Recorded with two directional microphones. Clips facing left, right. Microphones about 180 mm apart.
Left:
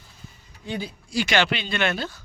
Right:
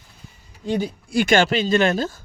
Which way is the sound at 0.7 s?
50° right (ahead or behind).